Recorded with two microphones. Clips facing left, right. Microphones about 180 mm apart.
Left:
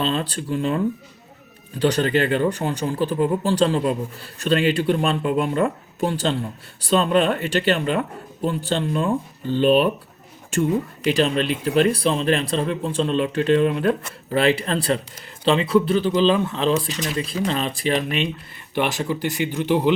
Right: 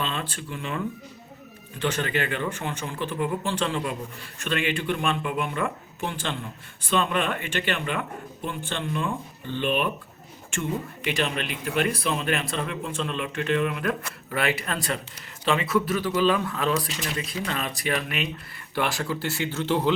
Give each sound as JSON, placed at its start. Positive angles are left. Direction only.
{"t": 0.0, "sound": "speech", "side_deg": 35}
{"t": 1.8, "sound": "speech", "side_deg": 35}
{"t": 11.0, "sound": "speech", "side_deg": 35}